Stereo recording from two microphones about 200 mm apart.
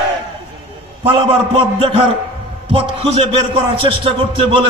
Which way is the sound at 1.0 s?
25° right (ahead or behind).